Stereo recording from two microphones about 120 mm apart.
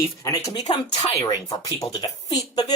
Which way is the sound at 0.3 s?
30° left (ahead or behind).